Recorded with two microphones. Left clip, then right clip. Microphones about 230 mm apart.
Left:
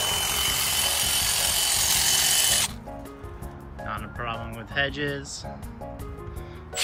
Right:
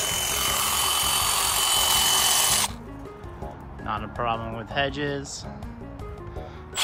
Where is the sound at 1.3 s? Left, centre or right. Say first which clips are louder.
Right 2 dB; right.